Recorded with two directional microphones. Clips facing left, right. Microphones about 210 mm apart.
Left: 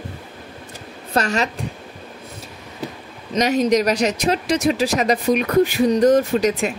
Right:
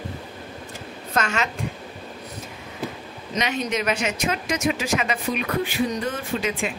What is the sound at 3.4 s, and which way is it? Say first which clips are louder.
Speech: left 9 dB; 40° left (ahead or behind).